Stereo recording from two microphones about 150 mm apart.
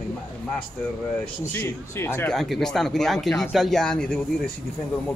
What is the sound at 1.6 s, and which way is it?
Speech, 15° left (ahead or behind).